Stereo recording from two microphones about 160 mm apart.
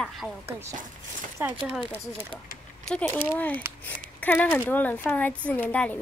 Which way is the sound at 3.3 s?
10° left (ahead or behind).